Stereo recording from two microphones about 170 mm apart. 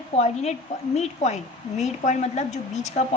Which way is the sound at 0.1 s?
40° left (ahead or behind).